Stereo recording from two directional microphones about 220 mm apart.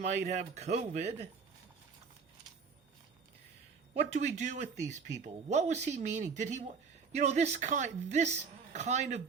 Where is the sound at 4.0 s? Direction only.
30° right (ahead or behind).